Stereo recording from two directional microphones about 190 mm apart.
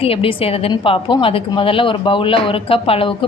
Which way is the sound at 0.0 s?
30° left (ahead or behind).